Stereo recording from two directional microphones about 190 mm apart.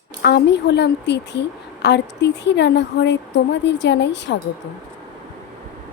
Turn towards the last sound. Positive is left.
turn(degrees=65)  # may be behind; listen again after turning